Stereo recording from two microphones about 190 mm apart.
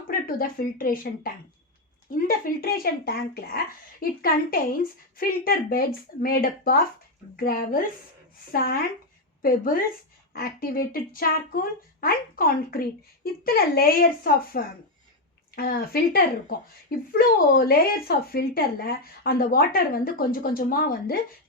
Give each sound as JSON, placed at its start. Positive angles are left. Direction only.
{"t": 0.1, "sound": "a woman's voice", "side_deg": 50}